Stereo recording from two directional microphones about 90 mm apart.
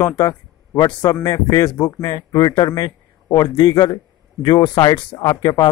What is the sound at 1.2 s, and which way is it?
A man's voice, 40° left (ahead or behind).